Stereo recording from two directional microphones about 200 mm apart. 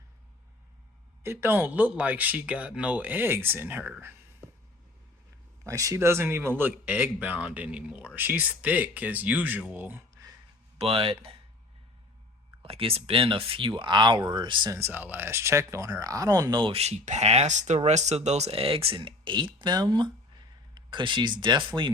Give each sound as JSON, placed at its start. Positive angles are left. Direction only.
{"t": 1.2, "sound": "speech", "side_deg": -10}
{"t": 5.6, "sound": "speech", "side_deg": -15}
{"t": 10.8, "sound": "speech", "side_deg": -30}
{"t": 12.6, "sound": "speech", "side_deg": -30}